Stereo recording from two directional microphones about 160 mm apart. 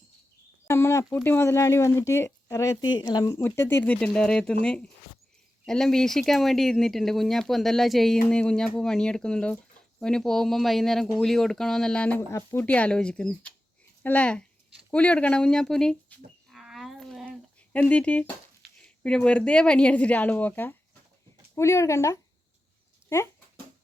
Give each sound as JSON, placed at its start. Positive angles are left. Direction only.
{"t": 0.7, "sound": "speech", "side_deg": 15}
{"t": 3.4, "sound": "speech", "side_deg": 15}
{"t": 16.5, "sound": "a sound", "side_deg": 0}
{"t": 18.8, "sound": "speech", "side_deg": 5}